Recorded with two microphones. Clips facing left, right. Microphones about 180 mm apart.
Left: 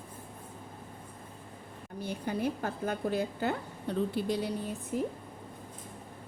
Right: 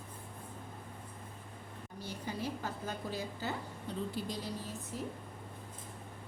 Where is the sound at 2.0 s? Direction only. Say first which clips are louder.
Left 7 dB; 55° left (ahead or behind).